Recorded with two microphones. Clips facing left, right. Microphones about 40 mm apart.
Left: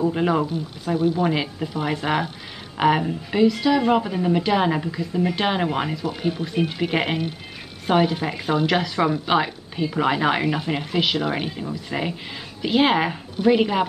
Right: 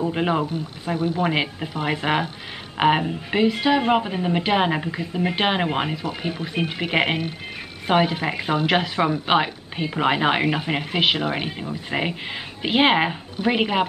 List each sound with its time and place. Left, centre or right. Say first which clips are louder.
0.1 s speech: left 1 dB; right
0.9 s speech: left 3 dB; right
1.2 s speech: even; right
6.0 s speech: left 2 dB; right
6.9 s speech: right 1 dB; right
10.6 s speech: right 1 dB; right